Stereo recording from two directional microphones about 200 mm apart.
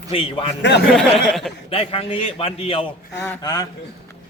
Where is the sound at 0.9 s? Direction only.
Centre (ahead or behind).